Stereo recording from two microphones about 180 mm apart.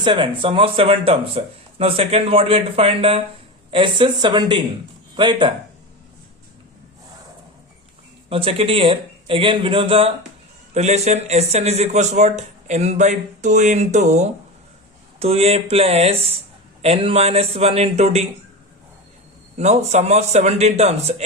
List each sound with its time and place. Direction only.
0.0 s speech: 25° right (ahead or behind)
8.3 s speech: 35° right (ahead or behind)
19.5 s speech: 40° right (ahead or behind)